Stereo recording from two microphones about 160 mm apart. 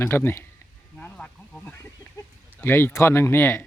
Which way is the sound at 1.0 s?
10° left (ahead or behind).